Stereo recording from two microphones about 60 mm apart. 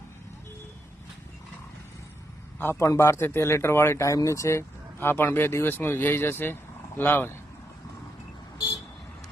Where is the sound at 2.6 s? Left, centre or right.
Left.